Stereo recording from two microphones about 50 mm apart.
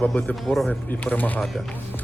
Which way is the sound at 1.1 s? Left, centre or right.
Left.